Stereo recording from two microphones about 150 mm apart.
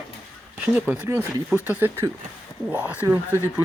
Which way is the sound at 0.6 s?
10° right (ahead or behind).